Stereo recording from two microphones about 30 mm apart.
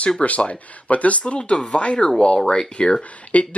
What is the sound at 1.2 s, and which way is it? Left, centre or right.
Speech, left.